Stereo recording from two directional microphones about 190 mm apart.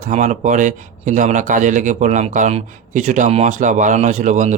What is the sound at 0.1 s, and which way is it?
A man's voice, 40° right (ahead or behind).